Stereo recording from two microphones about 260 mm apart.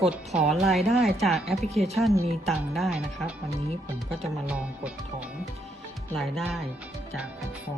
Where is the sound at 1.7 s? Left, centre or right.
Right.